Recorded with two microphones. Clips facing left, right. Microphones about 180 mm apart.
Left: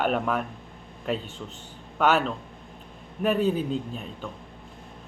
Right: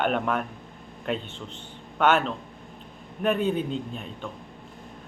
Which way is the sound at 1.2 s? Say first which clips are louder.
Left 1 dB; 45° left (ahead or behind).